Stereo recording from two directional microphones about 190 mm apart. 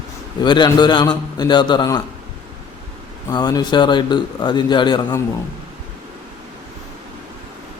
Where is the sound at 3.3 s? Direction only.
20° left (ahead or behind).